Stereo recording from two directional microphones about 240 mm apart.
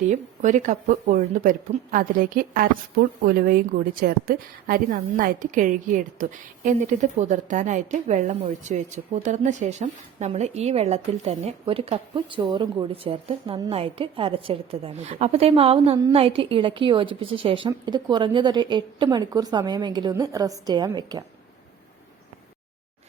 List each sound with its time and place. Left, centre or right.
0.1 s a woman's voice: right